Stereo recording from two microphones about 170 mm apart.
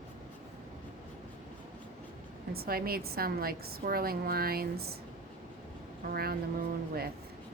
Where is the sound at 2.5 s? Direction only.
65° right (ahead or behind).